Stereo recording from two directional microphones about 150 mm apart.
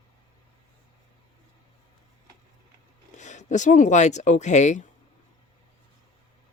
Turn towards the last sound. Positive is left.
turn(degrees=50)  # may be behind; listen again after turning